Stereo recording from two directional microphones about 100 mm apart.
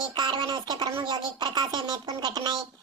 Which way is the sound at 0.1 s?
50° right (ahead or behind).